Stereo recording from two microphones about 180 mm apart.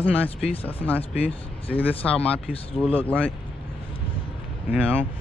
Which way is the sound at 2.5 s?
30° left (ahead or behind).